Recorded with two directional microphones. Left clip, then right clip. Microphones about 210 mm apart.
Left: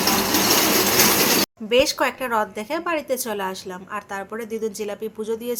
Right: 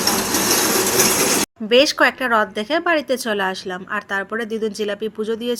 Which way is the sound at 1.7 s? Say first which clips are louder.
Right 5 dB; 25° right (ahead or behind).